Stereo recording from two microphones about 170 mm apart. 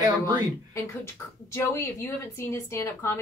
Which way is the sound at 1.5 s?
15° left (ahead or behind).